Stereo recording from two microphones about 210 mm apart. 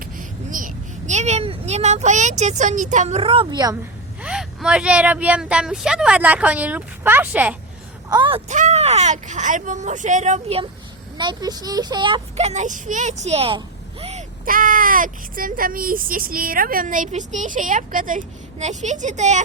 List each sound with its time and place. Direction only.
0.0 s a child's voice: 40° right (ahead or behind); by 3.8 s 20° right (ahead or behind)
4.2 s speech: 5° right (ahead or behind)
8.1 s speech: 20° right (ahead or behind)
8.4 s speech: 35° right (ahead or behind)
11.2 s speech: 20° right (ahead or behind)